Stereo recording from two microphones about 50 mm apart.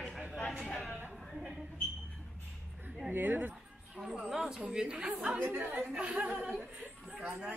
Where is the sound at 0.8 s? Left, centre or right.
Left.